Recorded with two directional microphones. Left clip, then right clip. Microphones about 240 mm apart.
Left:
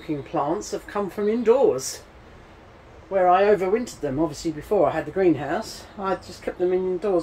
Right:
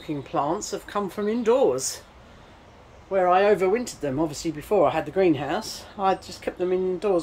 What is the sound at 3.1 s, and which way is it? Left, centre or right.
Speech, centre.